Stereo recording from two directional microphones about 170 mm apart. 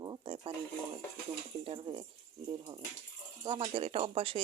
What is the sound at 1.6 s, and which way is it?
Speech, 30° right (ahead or behind).